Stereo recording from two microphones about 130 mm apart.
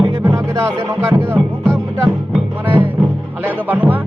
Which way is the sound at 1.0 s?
15° right (ahead or behind).